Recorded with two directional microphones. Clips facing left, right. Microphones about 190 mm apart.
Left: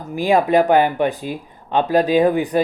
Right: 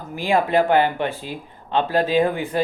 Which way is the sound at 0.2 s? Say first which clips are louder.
Left 4 dB; 15° left (ahead or behind).